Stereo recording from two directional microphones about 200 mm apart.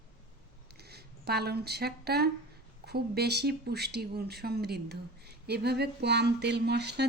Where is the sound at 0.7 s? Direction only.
55° right (ahead or behind).